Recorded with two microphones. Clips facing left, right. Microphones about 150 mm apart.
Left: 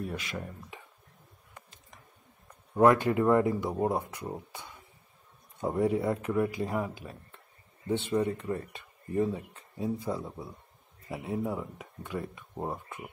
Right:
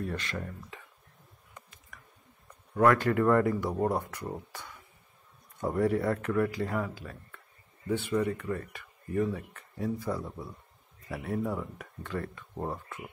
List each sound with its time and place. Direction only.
0.0 s speech: 10° left (ahead or behind)
1.9 s chewing: 25° left (ahead or behind)
2.7 s speech: 20° left (ahead or behind)